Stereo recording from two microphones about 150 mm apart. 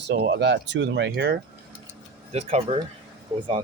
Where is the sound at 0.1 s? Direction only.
90° right.